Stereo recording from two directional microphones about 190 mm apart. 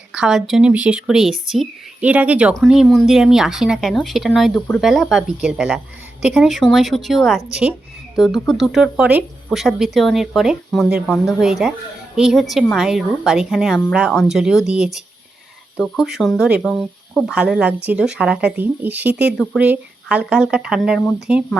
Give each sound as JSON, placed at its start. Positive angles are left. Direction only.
{"t": 0.1, "sound": "speech", "side_deg": 0}